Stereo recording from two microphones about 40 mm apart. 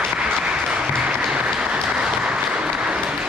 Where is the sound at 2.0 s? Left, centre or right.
Right.